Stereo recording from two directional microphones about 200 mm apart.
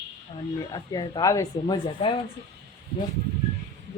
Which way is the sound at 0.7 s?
20° left (ahead or behind).